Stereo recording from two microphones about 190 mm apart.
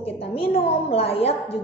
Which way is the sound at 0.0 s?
30° left (ahead or behind).